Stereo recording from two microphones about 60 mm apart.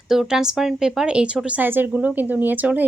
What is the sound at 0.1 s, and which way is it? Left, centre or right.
Speech, centre.